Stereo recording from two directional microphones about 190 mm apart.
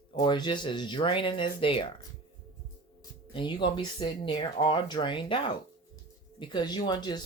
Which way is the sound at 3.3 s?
25° left (ahead or behind).